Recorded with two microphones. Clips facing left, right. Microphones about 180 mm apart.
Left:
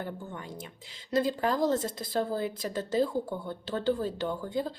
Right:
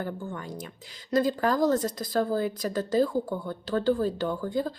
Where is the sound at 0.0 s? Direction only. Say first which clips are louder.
Right 4 dB; 25° left (ahead or behind).